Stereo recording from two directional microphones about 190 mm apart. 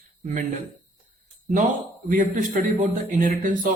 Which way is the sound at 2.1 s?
45° right (ahead or behind).